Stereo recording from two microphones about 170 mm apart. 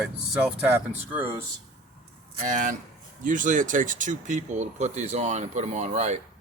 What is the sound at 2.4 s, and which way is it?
Speech, 50° right (ahead or behind).